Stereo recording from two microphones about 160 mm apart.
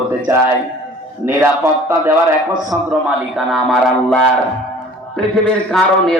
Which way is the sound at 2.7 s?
5° right (ahead or behind).